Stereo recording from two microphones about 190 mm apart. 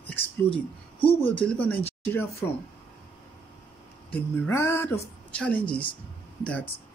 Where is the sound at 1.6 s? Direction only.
10° left (ahead or behind).